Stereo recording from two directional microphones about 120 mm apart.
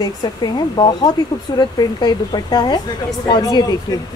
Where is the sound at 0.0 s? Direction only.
35° left (ahead or behind).